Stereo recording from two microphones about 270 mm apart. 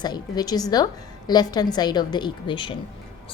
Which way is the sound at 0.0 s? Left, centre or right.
Centre.